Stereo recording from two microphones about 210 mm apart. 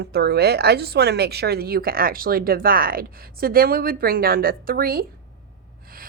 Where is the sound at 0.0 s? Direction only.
50° right (ahead or behind).